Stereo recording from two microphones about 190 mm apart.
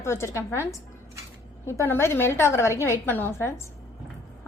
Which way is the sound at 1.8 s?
15° left (ahead or behind).